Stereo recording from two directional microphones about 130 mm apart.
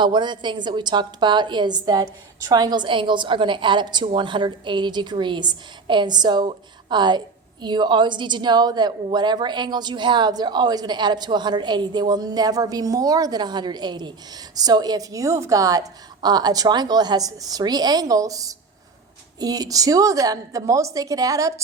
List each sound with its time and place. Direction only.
0.0 s a woman's voice: 35° right (ahead or behind)